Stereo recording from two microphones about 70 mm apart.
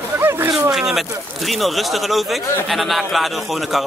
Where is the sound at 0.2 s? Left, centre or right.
Right.